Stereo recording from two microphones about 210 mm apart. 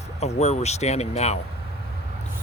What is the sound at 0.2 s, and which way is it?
Speech, 30° left (ahead or behind).